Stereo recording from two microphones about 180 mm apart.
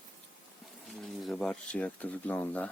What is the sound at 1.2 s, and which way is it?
Speech, centre (ahead or behind).